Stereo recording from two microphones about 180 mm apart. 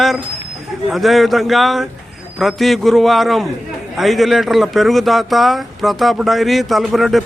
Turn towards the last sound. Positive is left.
turn(degrees=0)  # may be behind; listen again after turning